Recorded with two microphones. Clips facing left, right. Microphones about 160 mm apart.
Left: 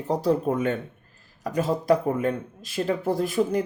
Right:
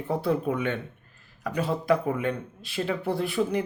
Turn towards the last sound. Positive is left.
turn(degrees=40)  # may be behind; listen again after turning